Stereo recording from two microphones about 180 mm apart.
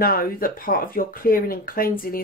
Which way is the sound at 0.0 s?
55° left (ahead or behind).